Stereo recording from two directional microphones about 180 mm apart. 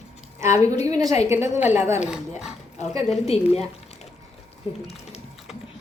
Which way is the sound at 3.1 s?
35° left (ahead or behind).